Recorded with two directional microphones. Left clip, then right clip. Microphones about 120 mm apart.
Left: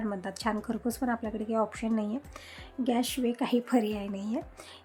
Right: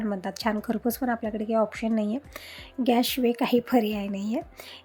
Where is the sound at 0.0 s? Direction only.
30° right (ahead or behind).